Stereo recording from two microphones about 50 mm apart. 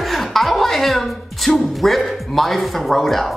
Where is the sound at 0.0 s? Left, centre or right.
Centre.